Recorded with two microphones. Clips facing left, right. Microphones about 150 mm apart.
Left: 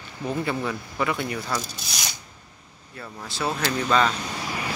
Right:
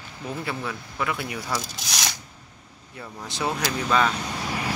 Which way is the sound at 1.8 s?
80° right.